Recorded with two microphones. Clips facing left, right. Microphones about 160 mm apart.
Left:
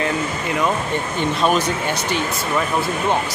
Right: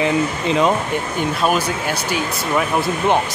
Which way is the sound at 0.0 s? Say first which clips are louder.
Right 4 dB; 20° right (ahead or behind).